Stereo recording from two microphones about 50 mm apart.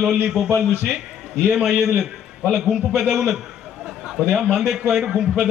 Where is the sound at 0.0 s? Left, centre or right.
Centre.